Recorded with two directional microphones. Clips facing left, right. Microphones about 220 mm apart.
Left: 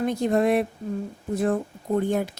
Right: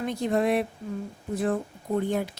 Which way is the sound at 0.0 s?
45° left (ahead or behind).